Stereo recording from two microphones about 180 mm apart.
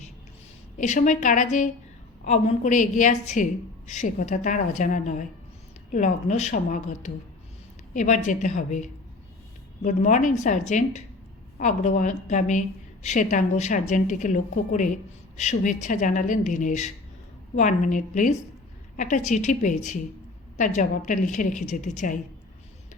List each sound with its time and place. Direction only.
0.8 s a woman's voice: 45° left (ahead or behind)